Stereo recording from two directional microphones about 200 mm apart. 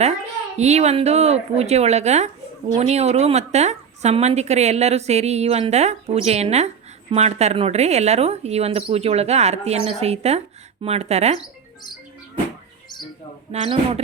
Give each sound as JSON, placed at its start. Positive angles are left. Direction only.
{"t": 0.0, "sound": "a woman's voice", "side_deg": -35}
{"t": 13.5, "sound": "a woman's voice", "side_deg": -30}